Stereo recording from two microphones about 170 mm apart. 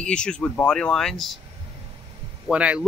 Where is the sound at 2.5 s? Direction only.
5° right (ahead or behind).